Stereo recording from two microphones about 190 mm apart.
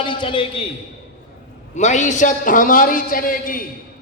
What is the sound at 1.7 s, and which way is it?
A man's voice, 40° left (ahead or behind).